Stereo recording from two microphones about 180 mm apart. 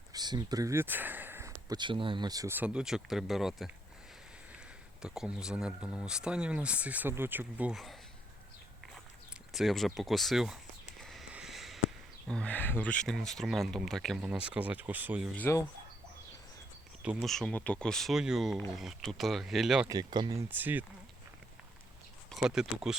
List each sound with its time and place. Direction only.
0.1 s speech: 20° right (ahead or behind); by 3.7 s centre (ahead or behind)
5.0 s speech: 5° right (ahead or behind)
9.5 s speech: centre (ahead or behind)
11.0 s a sound: centre (ahead or behind)
12.3 s speech: 5° left (ahead or behind); by 15.3 s 10° right (ahead or behind)
15.4 s speech: 15° left (ahead or behind)
17.0 s speech: 5° right (ahead or behind)
19.9 s speech: 20° right (ahead or behind)
20.5 s speech: 10° right (ahead or behind)
22.3 s speech: centre (ahead or behind)